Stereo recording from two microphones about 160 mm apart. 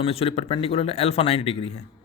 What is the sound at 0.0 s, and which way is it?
A woman's voice, 35° left (ahead or behind).